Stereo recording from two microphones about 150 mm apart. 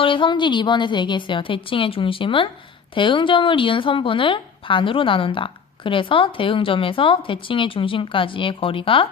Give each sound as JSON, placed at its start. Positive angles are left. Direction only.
{"t": 0.0, "sound": "a woman's voice", "side_deg": 35}